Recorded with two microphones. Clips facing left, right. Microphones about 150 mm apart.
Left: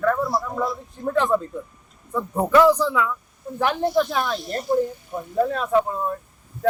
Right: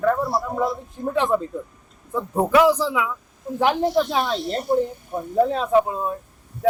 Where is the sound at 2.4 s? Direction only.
10° right (ahead or behind).